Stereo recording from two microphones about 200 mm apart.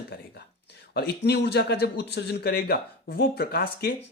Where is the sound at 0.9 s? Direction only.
55° left (ahead or behind).